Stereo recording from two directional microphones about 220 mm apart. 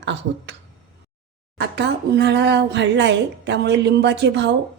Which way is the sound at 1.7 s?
50° right (ahead or behind).